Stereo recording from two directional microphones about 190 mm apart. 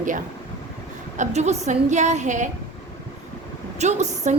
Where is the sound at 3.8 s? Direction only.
35° right (ahead or behind).